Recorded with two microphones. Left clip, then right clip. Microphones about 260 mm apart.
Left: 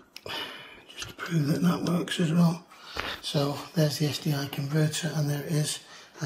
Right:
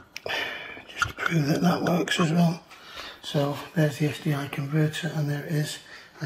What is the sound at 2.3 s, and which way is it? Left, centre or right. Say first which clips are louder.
Speech: right 2 dB; left.